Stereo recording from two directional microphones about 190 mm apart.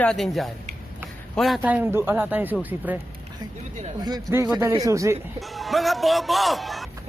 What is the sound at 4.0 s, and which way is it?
Speech, 20° right (ahead or behind).